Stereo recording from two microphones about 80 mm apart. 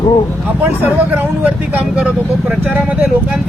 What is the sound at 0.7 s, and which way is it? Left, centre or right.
Speech, right.